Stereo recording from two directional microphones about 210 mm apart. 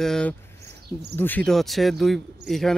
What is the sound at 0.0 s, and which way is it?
Speech, 5° left (ahead or behind).